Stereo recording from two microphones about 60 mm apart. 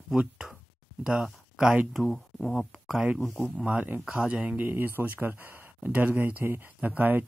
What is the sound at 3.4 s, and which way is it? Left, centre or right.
Speech, centre.